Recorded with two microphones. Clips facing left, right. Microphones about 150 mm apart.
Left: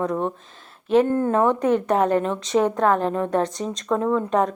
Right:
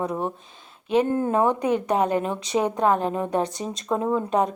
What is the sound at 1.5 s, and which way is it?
A woman's voice, centre (ahead or behind).